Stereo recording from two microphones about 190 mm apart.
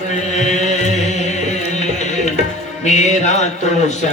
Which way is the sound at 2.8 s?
35° left (ahead or behind).